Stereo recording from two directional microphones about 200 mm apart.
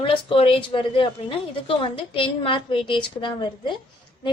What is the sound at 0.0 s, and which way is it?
A woman's voice, 25° left (ahead or behind).